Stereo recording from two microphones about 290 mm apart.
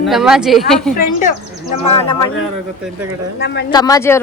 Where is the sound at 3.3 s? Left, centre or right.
Left.